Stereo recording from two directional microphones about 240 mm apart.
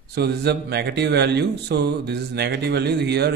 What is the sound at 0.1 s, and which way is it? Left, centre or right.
Speech, right.